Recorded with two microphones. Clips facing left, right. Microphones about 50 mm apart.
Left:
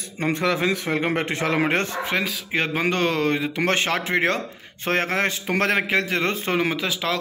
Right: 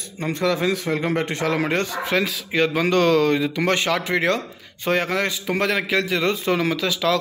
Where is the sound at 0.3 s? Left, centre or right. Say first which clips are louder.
Right 1 dB; centre.